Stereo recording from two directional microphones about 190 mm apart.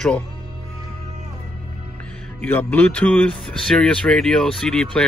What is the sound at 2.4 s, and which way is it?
Speech, 10° left (ahead or behind).